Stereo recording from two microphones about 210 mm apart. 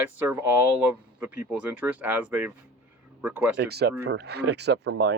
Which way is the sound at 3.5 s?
55° right (ahead or behind).